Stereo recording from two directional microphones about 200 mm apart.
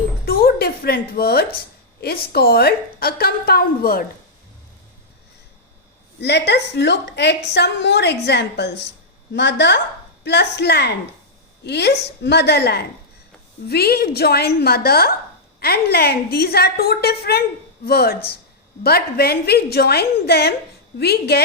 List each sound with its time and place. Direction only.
0.3 s a woman's voice: 50° left (ahead or behind)
6.1 s a woman's voice: 55° left (ahead or behind)